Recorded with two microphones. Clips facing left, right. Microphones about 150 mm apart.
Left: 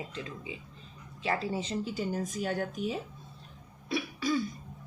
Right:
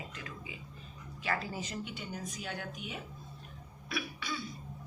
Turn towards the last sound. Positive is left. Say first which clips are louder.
# left 9 dB
turn(degrees=40)  # may be behind; listen again after turning